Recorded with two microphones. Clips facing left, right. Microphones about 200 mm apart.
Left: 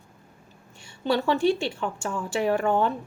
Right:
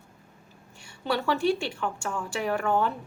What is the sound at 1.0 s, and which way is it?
A woman's voice, 20° left (ahead or behind).